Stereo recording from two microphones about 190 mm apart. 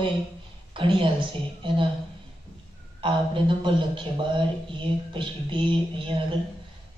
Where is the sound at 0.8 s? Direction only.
25° right (ahead or behind).